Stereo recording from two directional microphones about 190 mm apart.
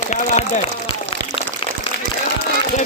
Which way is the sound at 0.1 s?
40° left (ahead or behind).